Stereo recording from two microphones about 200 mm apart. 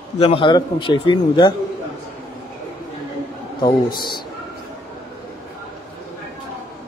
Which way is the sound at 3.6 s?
20° left (ahead or behind).